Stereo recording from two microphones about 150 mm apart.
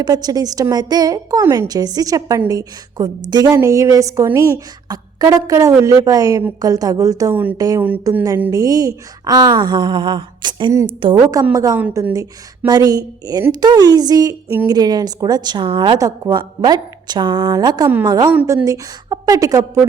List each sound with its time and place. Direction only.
0.0 s a woman's voice: 25° right (ahead or behind)
11.5 s a woman's voice: 25° right (ahead or behind)